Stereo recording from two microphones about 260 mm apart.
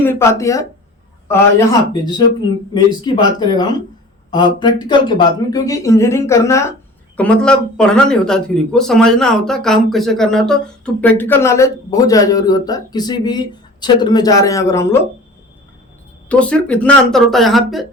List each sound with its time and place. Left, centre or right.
0.0 s a man's voice: centre
16.3 s a man's voice: centre